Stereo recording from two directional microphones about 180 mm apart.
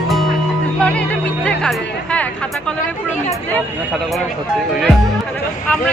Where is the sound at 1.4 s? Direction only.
5° left (ahead or behind).